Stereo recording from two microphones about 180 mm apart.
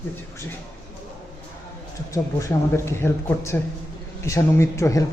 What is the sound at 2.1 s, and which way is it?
A man's voice, 15° left (ahead or behind).